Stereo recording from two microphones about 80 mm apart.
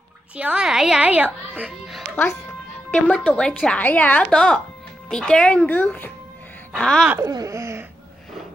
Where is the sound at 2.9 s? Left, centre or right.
Centre.